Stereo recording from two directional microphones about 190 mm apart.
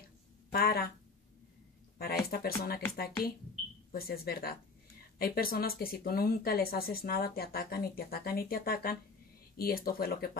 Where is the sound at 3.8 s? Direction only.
50° left (ahead or behind).